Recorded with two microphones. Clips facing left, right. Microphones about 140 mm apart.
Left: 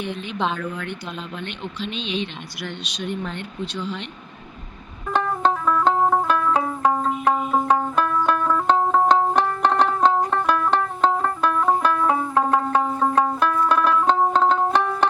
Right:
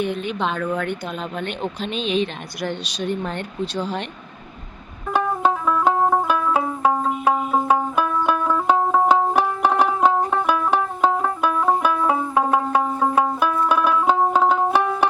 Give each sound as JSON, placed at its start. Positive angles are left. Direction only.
{"t": 0.0, "sound": "speech", "side_deg": -50}
{"t": 5.1, "sound": "music", "side_deg": -10}